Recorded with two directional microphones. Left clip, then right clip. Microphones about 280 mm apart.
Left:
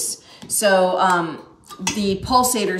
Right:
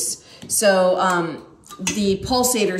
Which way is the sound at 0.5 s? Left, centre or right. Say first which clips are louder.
Even; centre.